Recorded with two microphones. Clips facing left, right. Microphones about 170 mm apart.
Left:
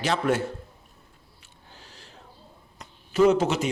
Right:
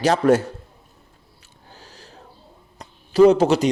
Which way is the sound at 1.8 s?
40° right (ahead or behind).